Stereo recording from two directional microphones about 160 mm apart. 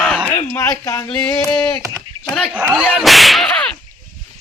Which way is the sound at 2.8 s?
5° left (ahead or behind).